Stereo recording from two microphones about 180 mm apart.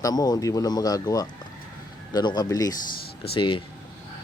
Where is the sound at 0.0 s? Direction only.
20° left (ahead or behind).